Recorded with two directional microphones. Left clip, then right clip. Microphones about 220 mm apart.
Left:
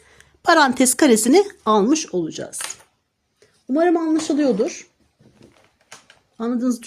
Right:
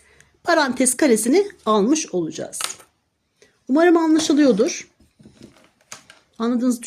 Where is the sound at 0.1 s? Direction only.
25° left (ahead or behind).